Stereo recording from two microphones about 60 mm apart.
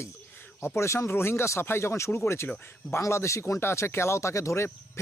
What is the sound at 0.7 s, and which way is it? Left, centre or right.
Speech, left.